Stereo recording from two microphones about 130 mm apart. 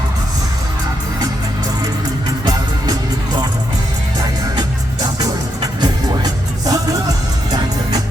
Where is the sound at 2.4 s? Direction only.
30° right (ahead or behind).